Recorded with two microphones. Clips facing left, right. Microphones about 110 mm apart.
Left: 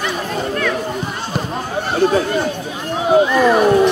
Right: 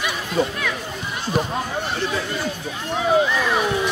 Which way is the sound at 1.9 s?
45° left (ahead or behind).